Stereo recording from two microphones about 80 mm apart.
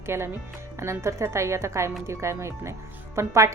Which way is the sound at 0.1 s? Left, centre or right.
Right.